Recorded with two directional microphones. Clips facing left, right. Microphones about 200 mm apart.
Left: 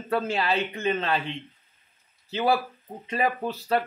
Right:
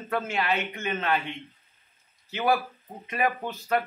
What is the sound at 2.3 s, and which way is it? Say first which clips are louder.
Speech: left 1 dB; 30° left (ahead or behind).